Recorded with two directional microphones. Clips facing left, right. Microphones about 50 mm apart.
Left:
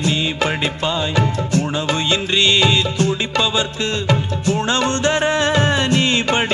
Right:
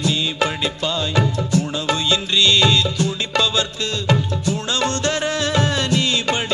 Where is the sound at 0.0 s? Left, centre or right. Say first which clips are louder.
Left 1 dB; left.